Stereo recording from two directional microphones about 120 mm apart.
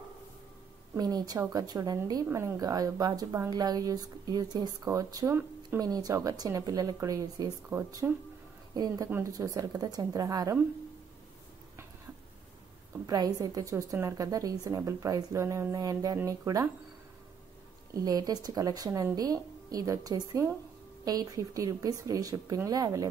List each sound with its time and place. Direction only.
0.9 s speech: 35° right (ahead or behind)
13.0 s speech: 35° right (ahead or behind)
17.9 s speech: 35° right (ahead or behind)